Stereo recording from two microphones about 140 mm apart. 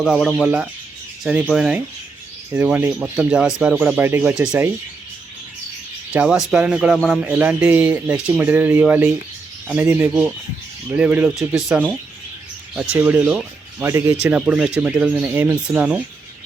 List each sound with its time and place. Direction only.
0.0 s speech: centre (ahead or behind)
0.4 s speech: 10° right (ahead or behind)
1.2 s rub: 5° right (ahead or behind)
1.5 s speech: 5° right (ahead or behind)
6.1 s speech: 5° right (ahead or behind)
7.3 s speech: 10° right (ahead or behind)
13.8 s speech: 20° right (ahead or behind)
14.2 s speech: 10° right (ahead or behind)